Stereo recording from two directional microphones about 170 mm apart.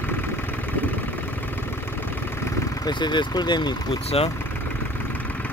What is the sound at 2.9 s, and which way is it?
Speech, 25° left (ahead or behind).